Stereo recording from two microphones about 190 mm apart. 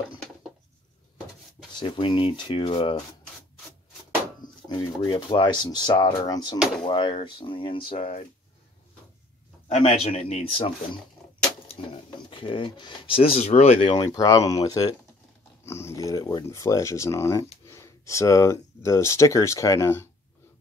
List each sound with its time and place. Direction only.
1.8 s speech: 25° left (ahead or behind)
4.6 s speech: 25° left (ahead or behind)
9.7 s speech: 35° left (ahead or behind); by 20.1 s 15° left (ahead or behind)